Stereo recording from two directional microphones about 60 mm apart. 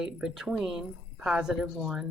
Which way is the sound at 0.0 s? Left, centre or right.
Centre.